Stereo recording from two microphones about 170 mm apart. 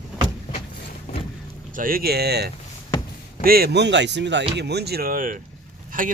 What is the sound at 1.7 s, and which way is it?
Speech, 55° right (ahead or behind).